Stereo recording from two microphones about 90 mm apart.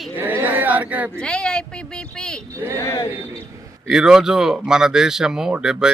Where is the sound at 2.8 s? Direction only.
35° left (ahead or behind).